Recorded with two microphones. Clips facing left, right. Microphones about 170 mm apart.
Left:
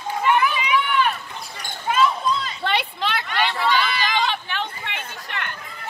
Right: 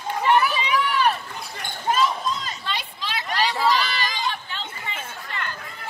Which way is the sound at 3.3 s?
40° right (ahead or behind).